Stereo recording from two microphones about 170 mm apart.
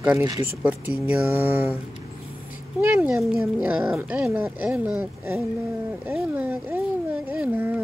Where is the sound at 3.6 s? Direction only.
10° right (ahead or behind).